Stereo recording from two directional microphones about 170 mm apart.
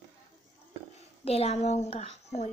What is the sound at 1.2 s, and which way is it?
A child's voice, 35° left (ahead or behind).